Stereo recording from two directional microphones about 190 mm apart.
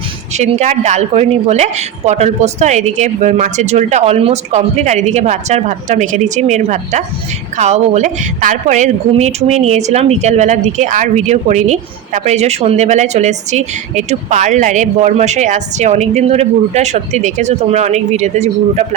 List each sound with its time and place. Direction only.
0.3 s a woman's voice: 35° right (ahead or behind)